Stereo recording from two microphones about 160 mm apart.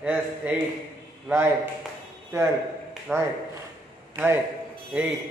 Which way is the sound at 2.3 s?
15° right (ahead or behind).